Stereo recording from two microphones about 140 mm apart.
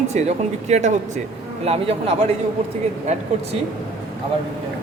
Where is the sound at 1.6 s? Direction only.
45° right (ahead or behind).